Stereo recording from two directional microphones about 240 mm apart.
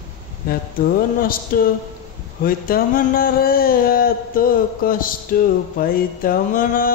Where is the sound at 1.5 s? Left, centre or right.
Left.